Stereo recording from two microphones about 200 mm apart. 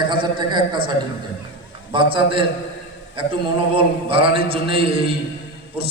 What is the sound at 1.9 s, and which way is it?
A man's voice, 25° right (ahead or behind).